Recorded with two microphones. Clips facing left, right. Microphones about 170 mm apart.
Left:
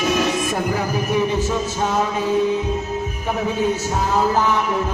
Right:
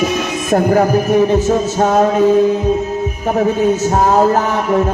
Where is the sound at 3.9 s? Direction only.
50° right (ahead or behind).